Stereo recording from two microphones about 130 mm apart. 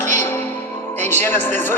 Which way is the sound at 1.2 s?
15° left (ahead or behind).